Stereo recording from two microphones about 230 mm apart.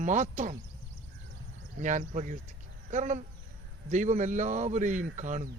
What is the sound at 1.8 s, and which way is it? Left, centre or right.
Speech, right.